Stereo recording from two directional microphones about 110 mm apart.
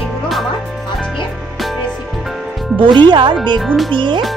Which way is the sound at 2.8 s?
45° right (ahead or behind).